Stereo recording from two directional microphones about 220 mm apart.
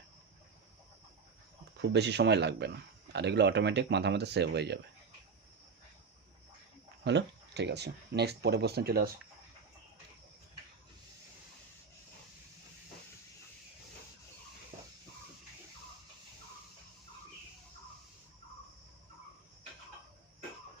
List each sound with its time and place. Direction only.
1.8 s speech: 50° right (ahead or behind)
7.0 s speech: 50° right (ahead or behind)